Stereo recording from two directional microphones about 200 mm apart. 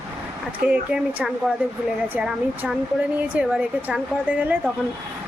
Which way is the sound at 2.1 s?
10° right (ahead or behind).